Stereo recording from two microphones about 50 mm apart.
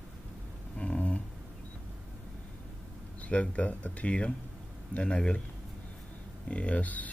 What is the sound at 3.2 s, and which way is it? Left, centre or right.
Speech, left.